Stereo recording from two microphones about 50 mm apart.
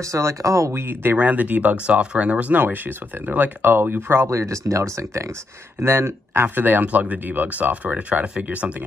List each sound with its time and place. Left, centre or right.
0.0 s speech: right
0.7 s speech: right
1.2 s speech: right
4.3 s speech: right
5.8 s speech: right
6.5 s speech: right